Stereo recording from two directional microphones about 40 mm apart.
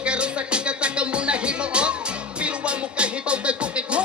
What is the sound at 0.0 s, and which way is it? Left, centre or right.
Music, right.